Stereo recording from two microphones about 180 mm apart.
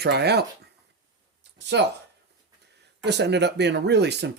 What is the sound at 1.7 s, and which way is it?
Speech, 75° right (ahead or behind).